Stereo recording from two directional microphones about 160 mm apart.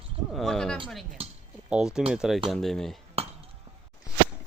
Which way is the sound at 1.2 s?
40° right (ahead or behind).